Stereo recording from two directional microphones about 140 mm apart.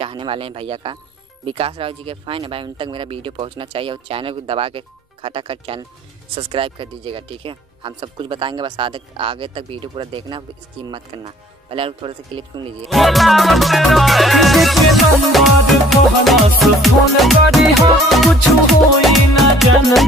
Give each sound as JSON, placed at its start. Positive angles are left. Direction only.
{"t": 0.0, "sound": "speech", "side_deg": -40}
{"t": 12.8, "sound": "music", "side_deg": 0}